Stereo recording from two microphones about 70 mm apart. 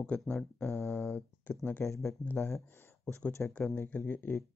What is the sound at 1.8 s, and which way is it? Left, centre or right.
Speech, left.